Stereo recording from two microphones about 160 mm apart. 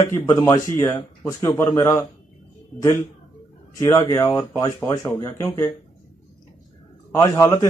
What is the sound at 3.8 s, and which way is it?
A man's voice, 20° left (ahead or behind).